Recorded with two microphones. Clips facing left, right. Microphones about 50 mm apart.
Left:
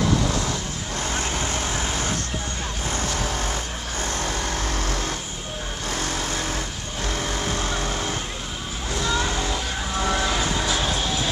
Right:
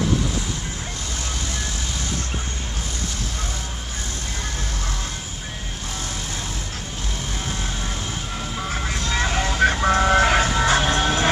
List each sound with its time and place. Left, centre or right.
9.1 s vehicle: right
10.6 s music: right
10.9 s music: right